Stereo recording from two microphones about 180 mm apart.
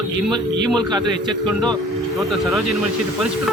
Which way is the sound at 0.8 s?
20° right (ahead or behind).